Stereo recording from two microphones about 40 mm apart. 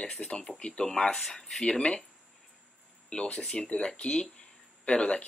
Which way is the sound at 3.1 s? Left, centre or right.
Left.